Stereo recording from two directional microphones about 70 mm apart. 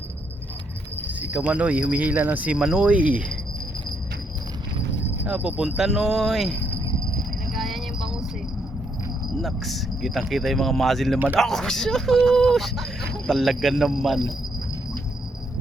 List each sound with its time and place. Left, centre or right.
1.0 s speech: right
2.6 s speech: centre
5.2 s speech: centre
7.5 s jingle bell: centre
9.4 s speech: centre